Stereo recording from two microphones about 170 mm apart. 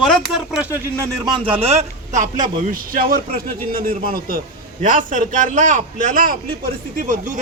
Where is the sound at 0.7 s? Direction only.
20° right (ahead or behind).